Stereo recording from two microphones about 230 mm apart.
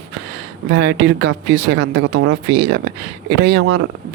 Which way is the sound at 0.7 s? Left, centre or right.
Right.